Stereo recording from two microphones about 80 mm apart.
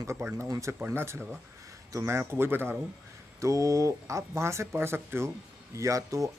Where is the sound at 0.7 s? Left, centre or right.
Right.